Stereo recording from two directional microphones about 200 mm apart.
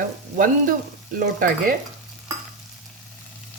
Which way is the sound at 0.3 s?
40° right (ahead or behind).